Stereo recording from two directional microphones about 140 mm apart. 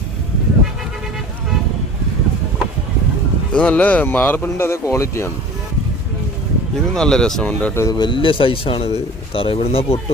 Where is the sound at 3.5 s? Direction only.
10° left (ahead or behind).